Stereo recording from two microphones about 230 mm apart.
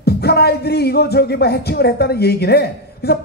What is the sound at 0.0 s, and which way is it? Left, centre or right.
Speech, left.